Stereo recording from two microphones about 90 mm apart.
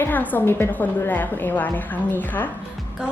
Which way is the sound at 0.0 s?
20° left (ahead or behind).